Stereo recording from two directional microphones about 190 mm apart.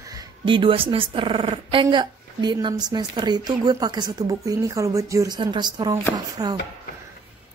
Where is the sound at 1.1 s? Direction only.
25° right (ahead or behind).